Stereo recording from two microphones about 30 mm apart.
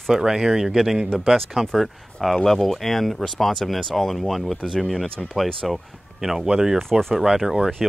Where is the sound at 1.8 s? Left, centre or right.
Centre.